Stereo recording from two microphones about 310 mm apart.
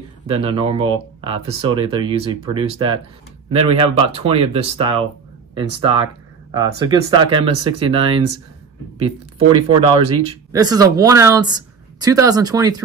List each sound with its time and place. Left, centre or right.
0.3 s speech: centre